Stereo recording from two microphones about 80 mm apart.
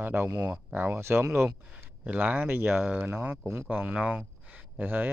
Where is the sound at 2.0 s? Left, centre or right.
Centre.